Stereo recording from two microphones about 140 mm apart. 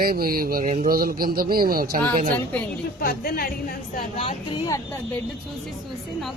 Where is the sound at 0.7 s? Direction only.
75° right (ahead or behind).